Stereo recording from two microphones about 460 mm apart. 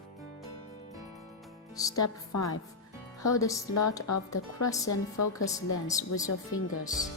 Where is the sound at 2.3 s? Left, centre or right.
Left.